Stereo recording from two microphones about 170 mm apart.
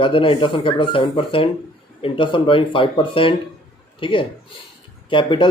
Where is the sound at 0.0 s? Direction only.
30° left (ahead or behind).